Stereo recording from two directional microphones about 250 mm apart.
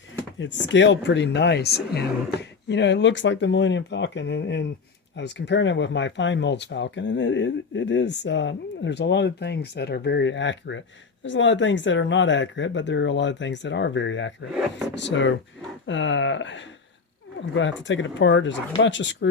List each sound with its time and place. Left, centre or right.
0.3 s speech: left